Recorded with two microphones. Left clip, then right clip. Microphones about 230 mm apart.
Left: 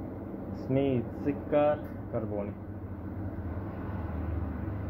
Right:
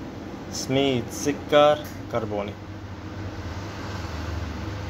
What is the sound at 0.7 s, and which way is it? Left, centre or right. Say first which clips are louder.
Speech: right 6 dB; right.